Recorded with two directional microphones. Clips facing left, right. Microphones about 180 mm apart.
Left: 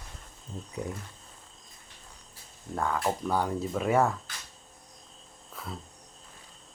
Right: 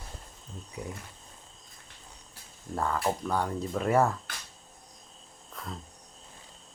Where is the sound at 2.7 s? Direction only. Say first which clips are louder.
Even; centre (ahead or behind).